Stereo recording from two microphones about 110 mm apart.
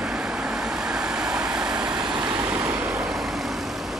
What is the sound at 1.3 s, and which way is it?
Vehicle, 5° right (ahead or behind).